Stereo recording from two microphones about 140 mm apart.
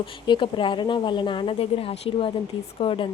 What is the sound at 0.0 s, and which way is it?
Speech, 35° left (ahead or behind).